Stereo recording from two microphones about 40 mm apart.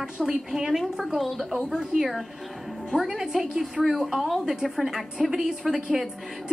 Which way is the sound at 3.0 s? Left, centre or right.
Centre.